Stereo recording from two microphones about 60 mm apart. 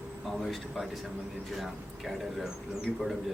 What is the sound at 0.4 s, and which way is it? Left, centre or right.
A man's voice, centre.